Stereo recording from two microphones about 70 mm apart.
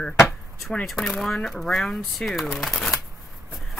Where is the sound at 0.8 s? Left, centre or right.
Centre.